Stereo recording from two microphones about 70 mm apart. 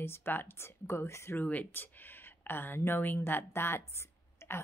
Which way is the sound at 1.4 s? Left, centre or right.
Left.